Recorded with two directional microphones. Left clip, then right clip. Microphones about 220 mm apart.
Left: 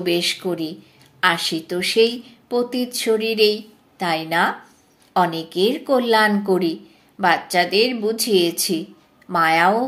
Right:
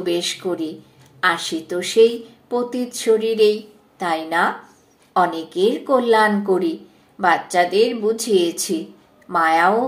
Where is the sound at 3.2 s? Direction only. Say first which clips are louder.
Even; 90° left.